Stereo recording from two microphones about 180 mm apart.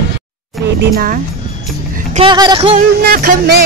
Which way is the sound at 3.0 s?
60° right (ahead or behind).